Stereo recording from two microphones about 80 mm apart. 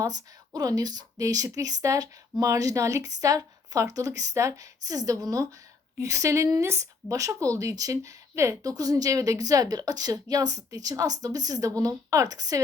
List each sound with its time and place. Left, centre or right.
0.0 s a woman's voice: right